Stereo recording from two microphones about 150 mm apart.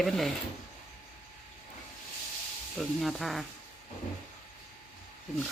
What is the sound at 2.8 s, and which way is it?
Speech, centre (ahead or behind).